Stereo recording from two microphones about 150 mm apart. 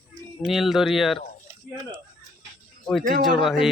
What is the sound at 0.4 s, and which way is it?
Speech, centre (ahead or behind).